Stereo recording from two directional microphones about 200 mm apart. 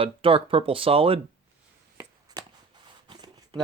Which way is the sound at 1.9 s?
20° right (ahead or behind).